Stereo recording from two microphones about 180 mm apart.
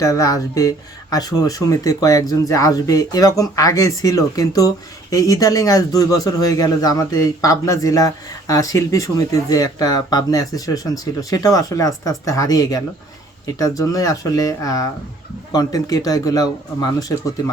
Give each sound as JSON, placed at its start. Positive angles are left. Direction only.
{"t": 0.0, "sound": "a man's voice", "side_deg": 20}